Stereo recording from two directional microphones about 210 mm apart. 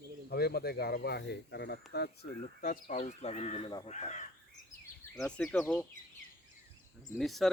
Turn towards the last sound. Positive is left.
turn(degrees=0)  # may be behind; listen again after turning